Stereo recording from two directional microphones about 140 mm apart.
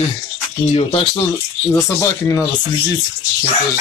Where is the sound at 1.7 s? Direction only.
20° left (ahead or behind).